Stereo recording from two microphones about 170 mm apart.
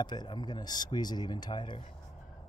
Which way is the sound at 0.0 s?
25° left (ahead or behind).